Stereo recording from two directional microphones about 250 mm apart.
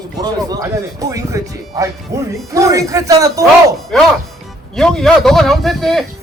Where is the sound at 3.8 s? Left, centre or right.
Centre.